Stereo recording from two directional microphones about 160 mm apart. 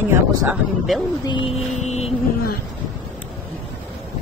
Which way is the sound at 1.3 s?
30° left (ahead or behind).